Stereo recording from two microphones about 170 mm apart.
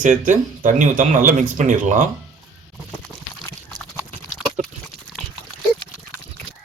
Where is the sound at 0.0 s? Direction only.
50° right (ahead or behind).